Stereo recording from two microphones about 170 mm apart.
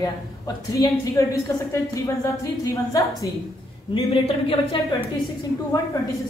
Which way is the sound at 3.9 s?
35° left (ahead or behind).